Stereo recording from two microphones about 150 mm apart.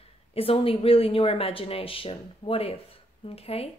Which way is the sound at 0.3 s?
40° left (ahead or behind).